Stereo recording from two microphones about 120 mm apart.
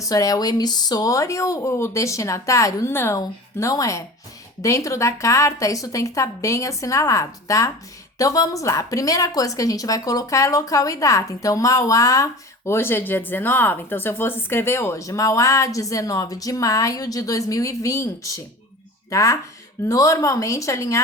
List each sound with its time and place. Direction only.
0.0 s speech: 30° left (ahead or behind)